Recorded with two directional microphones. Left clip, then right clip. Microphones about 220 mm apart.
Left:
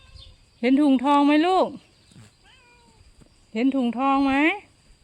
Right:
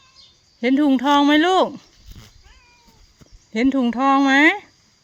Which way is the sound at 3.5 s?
15° right (ahead or behind).